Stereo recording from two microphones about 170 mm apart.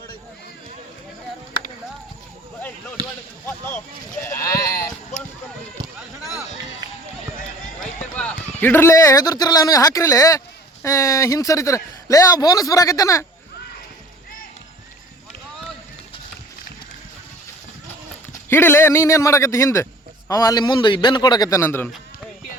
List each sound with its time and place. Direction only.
2.6 s basketball bounce: 10° left (ahead or behind)
4.2 s sheep: 15° left (ahead or behind)
7.8 s a man's voice: 10° left (ahead or behind)
18.4 s a man's voice: 15° left (ahead or behind)